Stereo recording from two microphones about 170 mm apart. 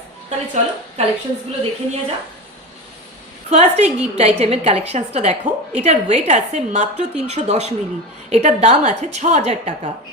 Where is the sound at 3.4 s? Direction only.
40° right (ahead or behind).